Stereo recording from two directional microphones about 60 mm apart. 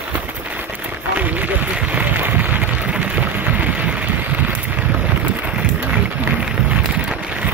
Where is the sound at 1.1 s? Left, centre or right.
Right.